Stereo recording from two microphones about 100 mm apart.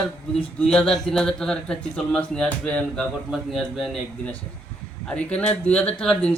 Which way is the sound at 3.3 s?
5° right (ahead or behind).